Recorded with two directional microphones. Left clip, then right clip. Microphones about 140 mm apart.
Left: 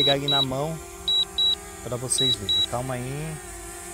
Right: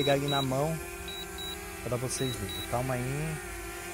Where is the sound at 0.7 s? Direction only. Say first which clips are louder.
Even; 15° left (ahead or behind).